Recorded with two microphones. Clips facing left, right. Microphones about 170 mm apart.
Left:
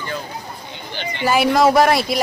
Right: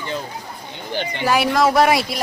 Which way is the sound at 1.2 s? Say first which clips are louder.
Left 3 dB; centre (ahead or behind).